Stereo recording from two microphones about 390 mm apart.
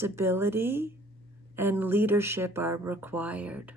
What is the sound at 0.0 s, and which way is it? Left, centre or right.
Speech, centre.